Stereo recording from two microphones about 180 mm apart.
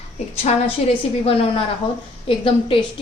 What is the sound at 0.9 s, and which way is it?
A woman's voice, 30° left (ahead or behind).